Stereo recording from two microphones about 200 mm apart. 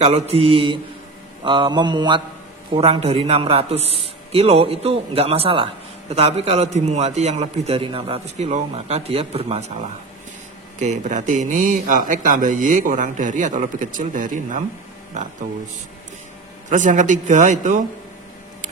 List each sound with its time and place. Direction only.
0.0 s a man's voice: 30° right (ahead or behind)
16.6 s a man's voice: 40° right (ahead or behind)